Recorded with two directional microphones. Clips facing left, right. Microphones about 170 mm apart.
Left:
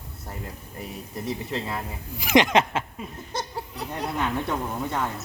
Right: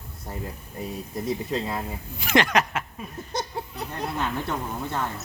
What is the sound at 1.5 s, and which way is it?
Speech, 15° right (ahead or behind).